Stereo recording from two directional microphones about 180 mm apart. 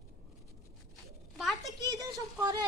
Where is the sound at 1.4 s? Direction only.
Centre (ahead or behind).